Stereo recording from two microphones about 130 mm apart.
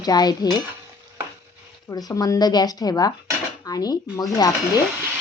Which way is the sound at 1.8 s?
30° left (ahead or behind).